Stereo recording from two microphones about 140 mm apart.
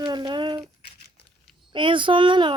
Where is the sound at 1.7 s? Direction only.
35° right (ahead or behind).